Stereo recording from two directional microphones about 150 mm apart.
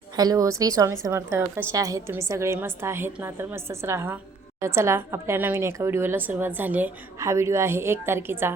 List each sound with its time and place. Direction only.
0.2 s a woman's voice: 25° right (ahead or behind)